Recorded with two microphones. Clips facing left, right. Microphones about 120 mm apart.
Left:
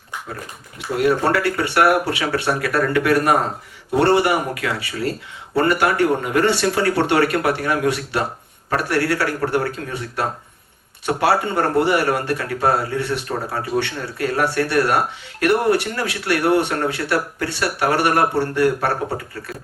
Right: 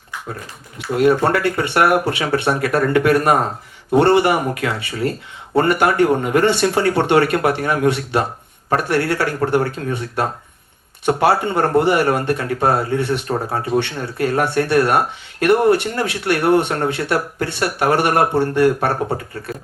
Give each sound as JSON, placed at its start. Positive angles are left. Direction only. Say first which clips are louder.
{"t": 0.9, "sound": "speech", "louder": "right 3 dB", "side_deg": -25}